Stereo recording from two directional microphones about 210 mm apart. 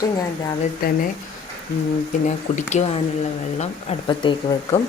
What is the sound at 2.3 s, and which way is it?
Speech, 35° left (ahead or behind).